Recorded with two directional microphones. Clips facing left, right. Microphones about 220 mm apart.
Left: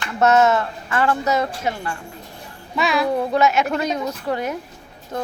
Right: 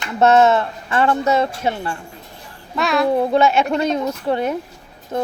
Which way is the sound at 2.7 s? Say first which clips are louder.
Right 2 dB; centre (ahead or behind).